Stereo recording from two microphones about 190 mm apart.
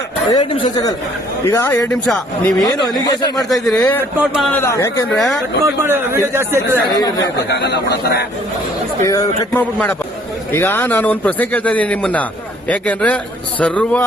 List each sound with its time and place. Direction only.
0.3 s speech: 20° left (ahead or behind)
2.0 s speech: centre (ahead or behind)
2.6 s speech: 20° left (ahead or behind)
3.3 s speech: centre (ahead or behind)
3.8 s speech: 10° left (ahead or behind)
5.1 s speech: centre (ahead or behind)
5.6 s a man's voice: 15° right (ahead or behind)
6.9 s speech: 20° left (ahead or behind)
7.5 s a man's voice: 65° left (ahead or behind)
9.0 s speech: 20° left (ahead or behind)
10.5 s speech: 10° left (ahead or behind)